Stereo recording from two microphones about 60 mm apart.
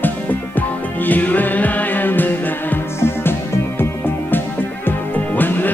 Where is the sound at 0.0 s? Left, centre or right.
Left.